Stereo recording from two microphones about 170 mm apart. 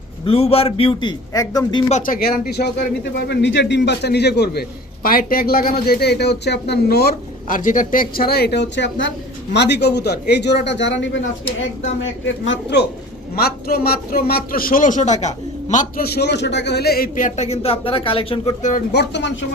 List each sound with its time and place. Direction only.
0.3 s a man's voice: 35° left (ahead or behind)
1.9 s speech: 55° left (ahead or behind)
5.0 s speech: 60° left (ahead or behind); by 11.2 s 90° left
12.2 s speech: 90° left
13.3 s a man's voice: 65° left (ahead or behind)
16.1 s speech: 85° left; by 18.5 s 35° left (ahead or behind)
18.9 s speech: 85° left